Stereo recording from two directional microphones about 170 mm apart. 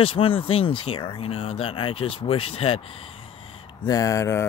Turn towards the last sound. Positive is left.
turn(degrees=20)  # may be behind; listen again after turning